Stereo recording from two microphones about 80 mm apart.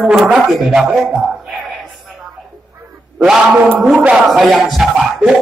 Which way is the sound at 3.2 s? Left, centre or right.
Centre.